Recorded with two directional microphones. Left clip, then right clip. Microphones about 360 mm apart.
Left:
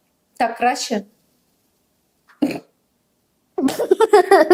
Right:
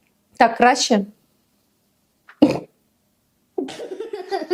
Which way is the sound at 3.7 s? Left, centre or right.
Left.